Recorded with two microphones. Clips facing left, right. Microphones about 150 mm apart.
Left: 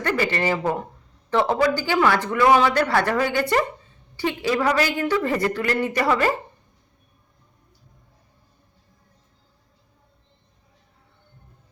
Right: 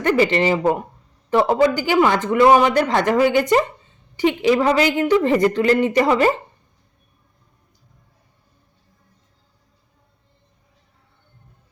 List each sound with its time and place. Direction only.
0.0 s a woman's voice: 20° right (ahead or behind)